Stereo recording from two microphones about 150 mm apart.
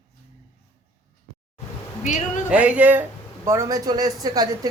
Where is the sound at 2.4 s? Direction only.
10° right (ahead or behind).